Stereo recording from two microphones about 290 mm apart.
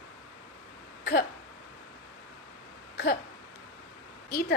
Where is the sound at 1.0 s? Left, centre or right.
Left.